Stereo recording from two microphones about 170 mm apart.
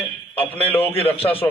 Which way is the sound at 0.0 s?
10° left (ahead or behind).